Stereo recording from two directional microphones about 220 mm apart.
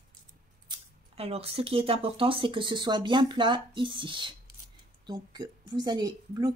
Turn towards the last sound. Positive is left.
turn(degrees=-20)  # may be behind; listen again after turning